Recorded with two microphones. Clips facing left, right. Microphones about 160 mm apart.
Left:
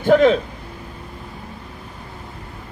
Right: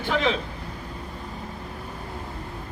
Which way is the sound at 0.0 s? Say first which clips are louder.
Left 11 dB; 45° left (ahead or behind).